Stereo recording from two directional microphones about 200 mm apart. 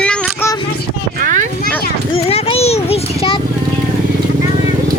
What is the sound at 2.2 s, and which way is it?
A child's voice, 30° left (ahead or behind).